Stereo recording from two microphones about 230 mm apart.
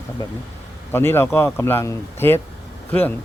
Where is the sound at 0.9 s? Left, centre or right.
Centre.